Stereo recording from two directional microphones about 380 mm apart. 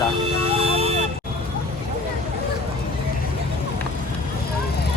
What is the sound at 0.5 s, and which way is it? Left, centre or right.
Emergency vehicle, centre.